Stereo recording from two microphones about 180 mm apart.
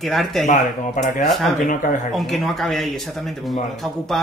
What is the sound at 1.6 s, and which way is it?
Speech, 45° left (ahead or behind).